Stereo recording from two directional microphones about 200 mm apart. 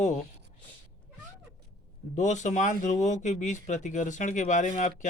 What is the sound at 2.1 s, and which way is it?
Speech, 35° left (ahead or behind).